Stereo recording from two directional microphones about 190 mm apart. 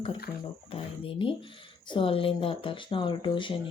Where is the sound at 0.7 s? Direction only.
30° left (ahead or behind).